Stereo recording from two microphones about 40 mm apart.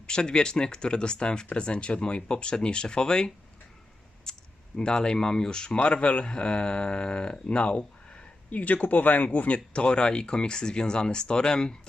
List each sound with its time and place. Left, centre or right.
0.1 s speech: left
4.3 s a sound: centre
4.8 s speech: centre
8.4 s speech: left
9.7 s speech: left